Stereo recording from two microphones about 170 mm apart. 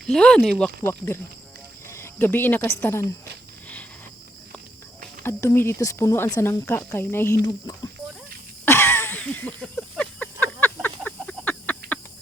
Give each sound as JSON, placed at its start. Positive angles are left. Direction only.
{"t": 0.0, "sound": "speech", "side_deg": 5}
{"t": 1.9, "sound": "cricket", "side_deg": 15}
{"t": 2.6, "sound": "speech", "side_deg": 15}
{"t": 5.2, "sound": "speech", "side_deg": 15}
{"t": 8.6, "sound": "a sound", "side_deg": 15}